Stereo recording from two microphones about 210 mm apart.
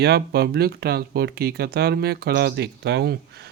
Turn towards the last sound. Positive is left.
turn(degrees=-50)  # may be behind; listen again after turning